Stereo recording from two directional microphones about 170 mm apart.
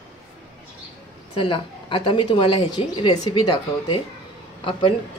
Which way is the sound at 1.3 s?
30° left (ahead or behind).